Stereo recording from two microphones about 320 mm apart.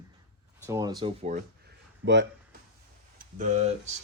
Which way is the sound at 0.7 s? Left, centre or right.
Centre.